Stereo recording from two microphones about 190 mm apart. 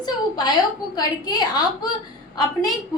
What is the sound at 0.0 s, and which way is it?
A woman's voice, 20° left (ahead or behind).